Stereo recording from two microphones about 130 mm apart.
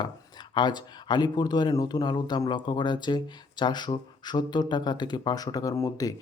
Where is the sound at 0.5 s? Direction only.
35° left (ahead or behind).